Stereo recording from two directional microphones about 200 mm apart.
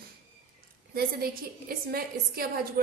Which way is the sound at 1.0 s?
50° right (ahead or behind).